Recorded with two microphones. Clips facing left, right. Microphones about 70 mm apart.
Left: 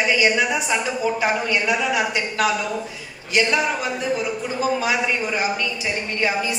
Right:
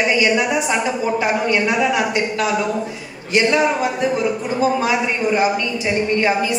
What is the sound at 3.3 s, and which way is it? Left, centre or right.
A woman's voice, right.